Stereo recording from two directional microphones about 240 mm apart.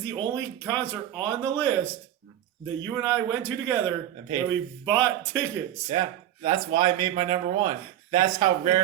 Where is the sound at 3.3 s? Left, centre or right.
Right.